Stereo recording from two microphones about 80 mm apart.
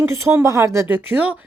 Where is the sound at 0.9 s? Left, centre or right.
Centre.